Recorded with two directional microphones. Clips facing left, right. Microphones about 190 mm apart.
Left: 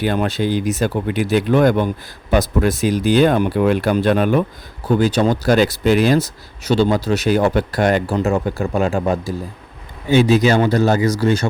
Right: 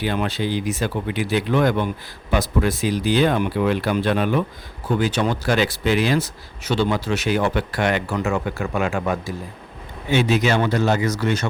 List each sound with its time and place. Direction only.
0.0 s speech: 45° left (ahead or behind)